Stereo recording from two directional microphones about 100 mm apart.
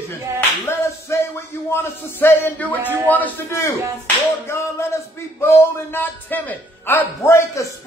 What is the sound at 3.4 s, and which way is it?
Speech, 30° left (ahead or behind).